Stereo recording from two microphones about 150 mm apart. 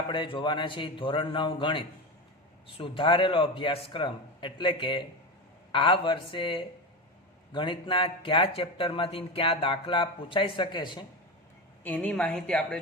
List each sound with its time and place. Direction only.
0.1 s speech: 30° left (ahead or behind)
11.8 s a woman's voice: 10° left (ahead or behind)